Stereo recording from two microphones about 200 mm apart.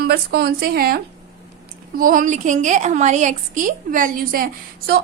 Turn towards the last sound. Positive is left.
turn(degrees=-50)  # may be behind; listen again after turning